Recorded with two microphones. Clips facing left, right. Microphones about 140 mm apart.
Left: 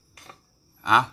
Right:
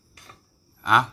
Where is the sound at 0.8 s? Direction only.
Centre (ahead or behind).